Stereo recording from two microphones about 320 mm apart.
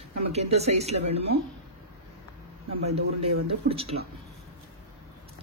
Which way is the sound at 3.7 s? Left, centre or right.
Centre.